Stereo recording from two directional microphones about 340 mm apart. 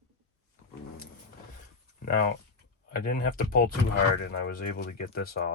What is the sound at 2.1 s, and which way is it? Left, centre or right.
Speech, left.